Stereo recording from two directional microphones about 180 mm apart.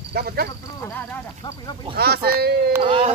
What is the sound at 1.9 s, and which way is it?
Speech, 60° right (ahead or behind).